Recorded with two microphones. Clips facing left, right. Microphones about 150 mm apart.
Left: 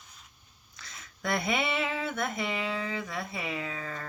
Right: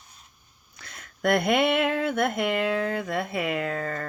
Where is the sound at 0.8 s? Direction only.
60° right (ahead or behind).